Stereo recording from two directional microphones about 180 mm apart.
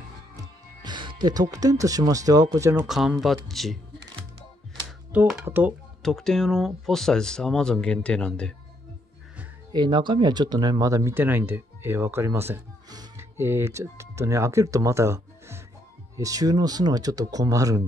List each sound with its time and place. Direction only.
0.4 s speech: 25° right (ahead or behind)
2.9 s speech: centre (ahead or behind)
5.1 s speech: 10° right (ahead or behind)
6.0 s speech: centre (ahead or behind)
9.7 s speech: 25° right (ahead or behind)